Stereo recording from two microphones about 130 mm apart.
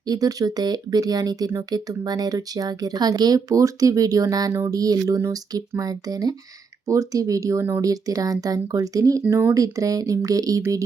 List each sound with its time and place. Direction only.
0.0 s speech: 30° right (ahead or behind)